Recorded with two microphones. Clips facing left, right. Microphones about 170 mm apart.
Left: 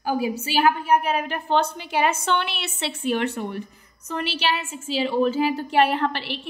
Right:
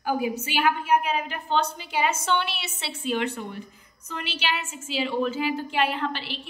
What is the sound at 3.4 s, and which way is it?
Speech, 70° left (ahead or behind).